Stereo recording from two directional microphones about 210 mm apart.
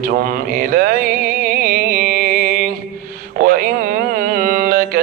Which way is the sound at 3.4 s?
40° right (ahead or behind).